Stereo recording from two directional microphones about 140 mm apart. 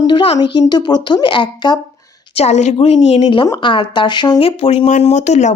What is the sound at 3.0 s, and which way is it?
A woman's voice, 40° left (ahead or behind).